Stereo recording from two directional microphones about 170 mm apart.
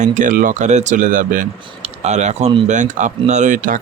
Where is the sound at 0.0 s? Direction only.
45° right (ahead or behind).